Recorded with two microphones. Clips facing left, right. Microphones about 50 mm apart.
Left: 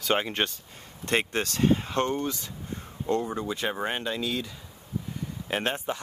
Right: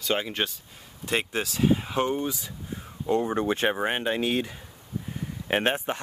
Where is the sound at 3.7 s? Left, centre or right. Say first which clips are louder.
Right 3 dB; right.